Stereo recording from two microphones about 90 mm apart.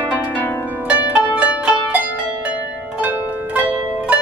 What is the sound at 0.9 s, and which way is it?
Pizzicato, 15° right (ahead or behind).